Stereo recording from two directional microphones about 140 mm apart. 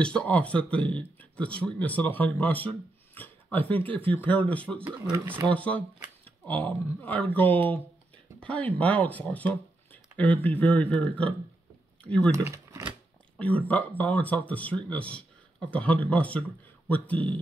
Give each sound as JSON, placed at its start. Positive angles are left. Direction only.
{"t": 0.0, "sound": "speech", "side_deg": 10}
{"t": 3.2, "sound": "a sound", "side_deg": 15}
{"t": 3.5, "sound": "speech", "side_deg": 10}
{"t": 4.8, "sound": "speech", "side_deg": -15}
{"t": 5.5, "sound": "speech", "side_deg": 10}
{"t": 12.3, "sound": "a sound", "side_deg": -25}
{"t": 13.4, "sound": "speech", "side_deg": 10}